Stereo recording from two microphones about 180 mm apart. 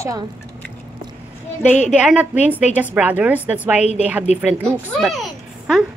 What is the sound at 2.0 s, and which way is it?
A woman's voice, 10° right (ahead or behind).